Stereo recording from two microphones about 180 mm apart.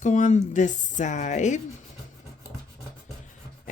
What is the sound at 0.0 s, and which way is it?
Speech, 40° left (ahead or behind).